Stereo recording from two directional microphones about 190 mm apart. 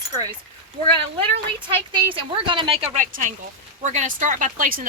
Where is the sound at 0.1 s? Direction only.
20° right (ahead or behind).